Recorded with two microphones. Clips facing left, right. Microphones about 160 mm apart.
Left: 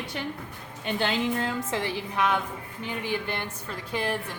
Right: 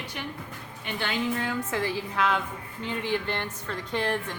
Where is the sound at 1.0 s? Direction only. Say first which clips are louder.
Left 1 dB; 25° left (ahead or behind).